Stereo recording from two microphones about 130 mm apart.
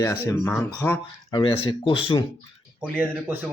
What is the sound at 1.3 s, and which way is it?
Speech, 40° left (ahead or behind).